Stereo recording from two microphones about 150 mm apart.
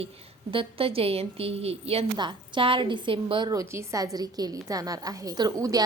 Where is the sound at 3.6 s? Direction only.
20° right (ahead or behind).